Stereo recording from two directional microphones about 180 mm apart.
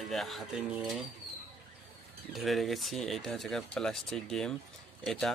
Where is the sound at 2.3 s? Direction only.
Centre (ahead or behind).